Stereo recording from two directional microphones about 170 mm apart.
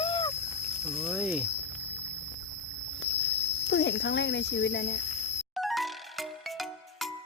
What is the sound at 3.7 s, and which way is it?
Speech, 90° left.